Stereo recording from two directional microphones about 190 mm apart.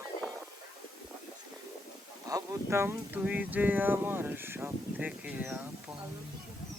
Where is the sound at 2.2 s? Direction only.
15° right (ahead or behind).